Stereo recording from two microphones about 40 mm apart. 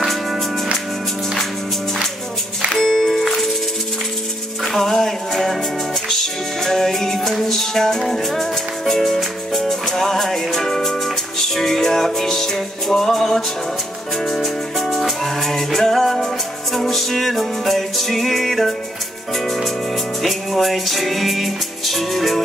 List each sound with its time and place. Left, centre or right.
2.8 s music: centre
4.7 s music: centre